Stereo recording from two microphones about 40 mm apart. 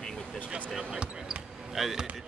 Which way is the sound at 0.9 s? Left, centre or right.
Centre.